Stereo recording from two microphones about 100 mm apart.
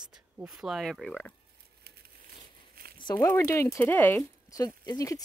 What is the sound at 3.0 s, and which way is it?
Speech, 45° left (ahead or behind).